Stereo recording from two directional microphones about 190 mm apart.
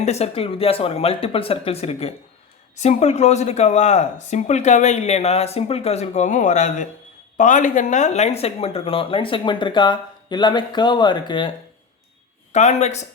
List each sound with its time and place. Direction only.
0.0 s speech: 35° left (ahead or behind)
12.5 s speech: 35° left (ahead or behind)